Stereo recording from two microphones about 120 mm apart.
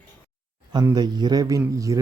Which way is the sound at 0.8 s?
35° right (ahead or behind).